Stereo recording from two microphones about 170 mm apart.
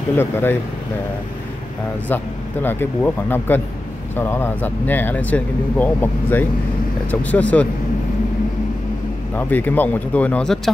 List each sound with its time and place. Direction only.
0.2 s speech: 15° left (ahead or behind)
2.0 s speech: 10° left (ahead or behind)
9.3 s speech: 10° left (ahead or behind)